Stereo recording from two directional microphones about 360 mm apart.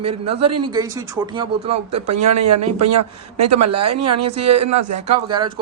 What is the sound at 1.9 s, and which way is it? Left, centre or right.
Speech, right.